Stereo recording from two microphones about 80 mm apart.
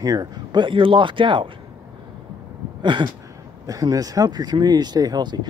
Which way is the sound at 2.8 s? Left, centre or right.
Right.